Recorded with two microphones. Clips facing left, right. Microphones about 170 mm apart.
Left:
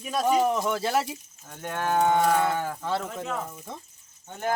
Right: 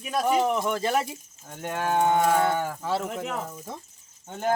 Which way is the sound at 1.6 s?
15° right (ahead or behind).